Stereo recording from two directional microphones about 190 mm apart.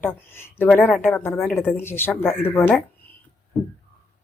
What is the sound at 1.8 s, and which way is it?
Speech, 10° left (ahead or behind).